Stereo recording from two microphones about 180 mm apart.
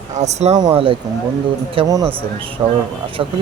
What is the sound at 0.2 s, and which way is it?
Speech, 35° right (ahead or behind).